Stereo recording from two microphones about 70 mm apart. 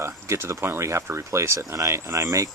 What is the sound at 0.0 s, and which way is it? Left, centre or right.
Speech, right.